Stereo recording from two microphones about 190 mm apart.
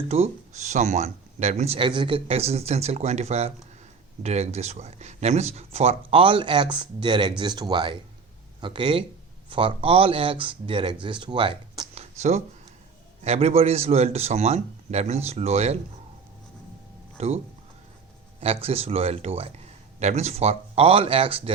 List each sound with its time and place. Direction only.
0.1 s speech: 35° right (ahead or behind)
17.2 s a man's voice: 35° right (ahead or behind)